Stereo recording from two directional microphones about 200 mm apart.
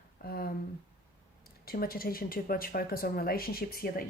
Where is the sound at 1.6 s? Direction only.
50° left (ahead or behind).